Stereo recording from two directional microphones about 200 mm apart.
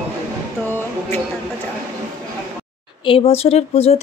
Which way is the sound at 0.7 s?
10° left (ahead or behind).